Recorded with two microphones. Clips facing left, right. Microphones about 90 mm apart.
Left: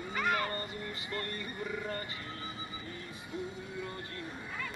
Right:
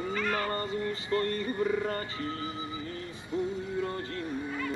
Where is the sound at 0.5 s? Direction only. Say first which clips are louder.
Right 8 dB; 30° right (ahead or behind).